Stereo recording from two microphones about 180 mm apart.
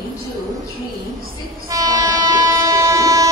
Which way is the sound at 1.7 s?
20° right (ahead or behind).